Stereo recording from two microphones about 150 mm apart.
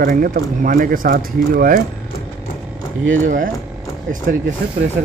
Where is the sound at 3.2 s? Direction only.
65° right (ahead or behind).